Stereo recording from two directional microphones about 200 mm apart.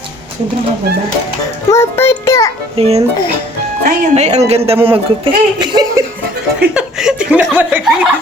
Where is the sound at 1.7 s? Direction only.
10° left (ahead or behind).